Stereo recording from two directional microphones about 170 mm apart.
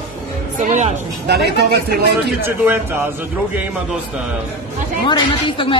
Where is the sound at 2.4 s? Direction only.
10° right (ahead or behind).